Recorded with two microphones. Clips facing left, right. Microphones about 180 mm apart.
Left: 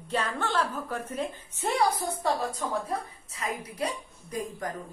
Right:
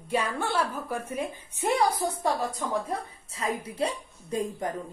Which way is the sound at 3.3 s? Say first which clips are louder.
Right 4 dB; 30° right (ahead or behind).